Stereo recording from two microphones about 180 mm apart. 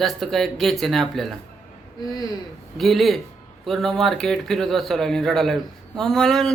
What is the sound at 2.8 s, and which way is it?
Speech, centre (ahead or behind).